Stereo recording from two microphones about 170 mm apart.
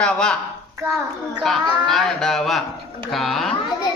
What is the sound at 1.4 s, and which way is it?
A man's voice, centre (ahead or behind).